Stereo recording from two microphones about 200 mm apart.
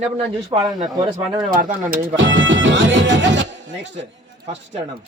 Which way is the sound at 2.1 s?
65° right (ahead or behind).